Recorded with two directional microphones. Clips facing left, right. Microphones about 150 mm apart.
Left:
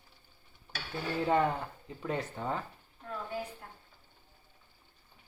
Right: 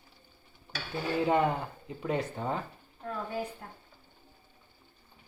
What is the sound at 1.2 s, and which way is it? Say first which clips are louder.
Speech: right 1 dB; 15° right (ahead or behind).